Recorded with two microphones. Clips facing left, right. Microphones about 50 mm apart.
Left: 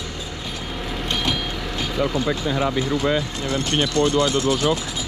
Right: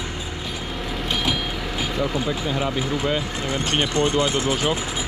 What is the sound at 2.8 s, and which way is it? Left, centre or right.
Speech, centre.